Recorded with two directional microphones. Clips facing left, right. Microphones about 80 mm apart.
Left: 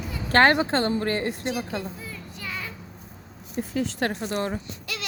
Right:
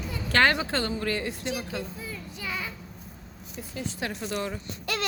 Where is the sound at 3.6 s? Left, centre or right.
Left.